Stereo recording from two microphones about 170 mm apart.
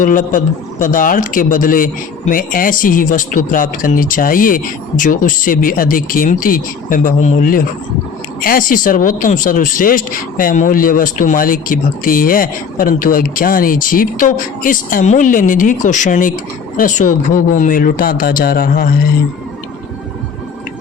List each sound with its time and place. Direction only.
0.0 s speech: 50° left (ahead or behind)